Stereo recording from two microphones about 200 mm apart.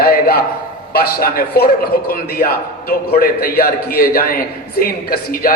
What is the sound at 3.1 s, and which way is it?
A man's voice, 45° left (ahead or behind).